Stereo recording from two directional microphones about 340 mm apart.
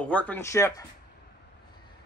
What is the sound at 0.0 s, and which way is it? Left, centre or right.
Speech, centre.